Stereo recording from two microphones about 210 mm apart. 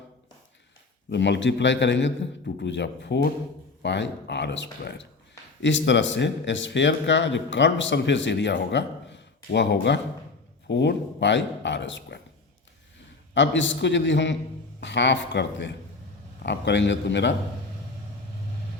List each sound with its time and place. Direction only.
1.1 s speech: 55° left (ahead or behind)
13.3 s speech: 60° left (ahead or behind)